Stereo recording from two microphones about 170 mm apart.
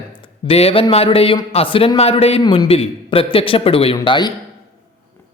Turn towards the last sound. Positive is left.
turn(degrees=25)  # may be behind; listen again after turning